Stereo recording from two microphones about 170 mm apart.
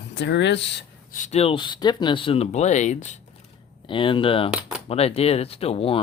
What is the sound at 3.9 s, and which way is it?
Speech, 30° left (ahead or behind).